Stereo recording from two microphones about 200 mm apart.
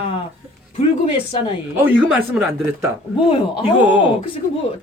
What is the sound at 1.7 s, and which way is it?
Speech, 10° right (ahead or behind).